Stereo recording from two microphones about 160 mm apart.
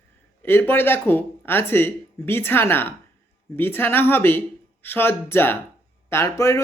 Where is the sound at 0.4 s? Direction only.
15° left (ahead or behind).